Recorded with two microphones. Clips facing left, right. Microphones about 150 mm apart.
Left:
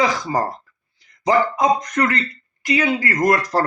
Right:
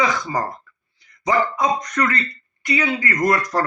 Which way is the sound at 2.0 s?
30° left (ahead or behind).